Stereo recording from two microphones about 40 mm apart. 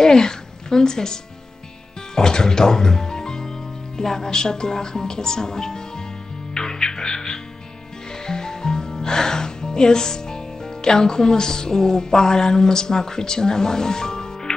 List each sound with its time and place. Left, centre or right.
0.0 s a woman's voice: centre
6.5 s music: centre